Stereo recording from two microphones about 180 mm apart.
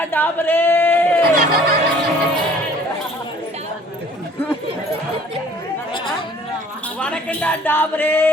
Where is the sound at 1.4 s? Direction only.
55° right (ahead or behind).